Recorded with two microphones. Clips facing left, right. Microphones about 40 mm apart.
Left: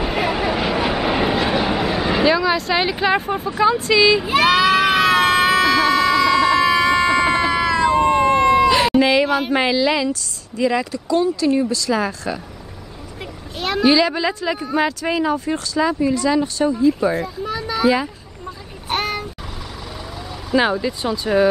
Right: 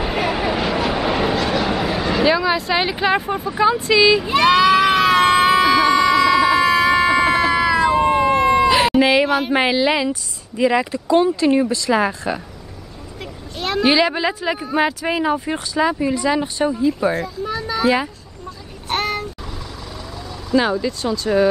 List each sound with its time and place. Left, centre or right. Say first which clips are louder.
0.0 s vehicle: even; centre
2.2 s speech: even; centre
4.2 s a sound: right 1 dB; centre
10.6 s speech: right 2 dB; centre
11.1 s speech: right 2 dB; right
13.2 s vehicle: even; centre
13.8 s speech: left 1 dB; centre
16.8 s a child's voice: left 1 dB; centre
18.9 s a sound: right 1 dB; centre
20.5 s speech: even; centre